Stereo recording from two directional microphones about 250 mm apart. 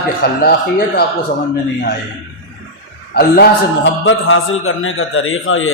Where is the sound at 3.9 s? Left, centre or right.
Left.